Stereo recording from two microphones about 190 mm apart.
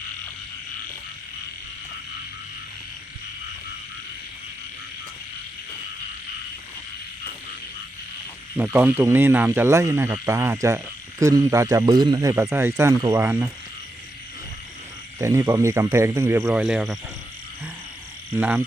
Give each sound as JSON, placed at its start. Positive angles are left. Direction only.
{"t": 8.5, "sound": "speech", "side_deg": -10}
{"t": 15.2, "sound": "speech", "side_deg": -15}
{"t": 18.3, "sound": "frog", "side_deg": -10}